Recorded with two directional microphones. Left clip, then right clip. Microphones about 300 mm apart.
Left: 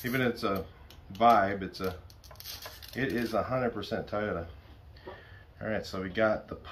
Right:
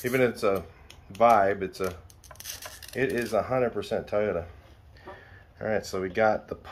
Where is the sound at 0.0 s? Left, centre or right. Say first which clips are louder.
Right 6 dB; centre.